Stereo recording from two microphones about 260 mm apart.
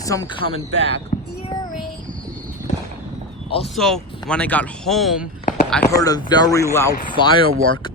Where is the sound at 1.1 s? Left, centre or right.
Left.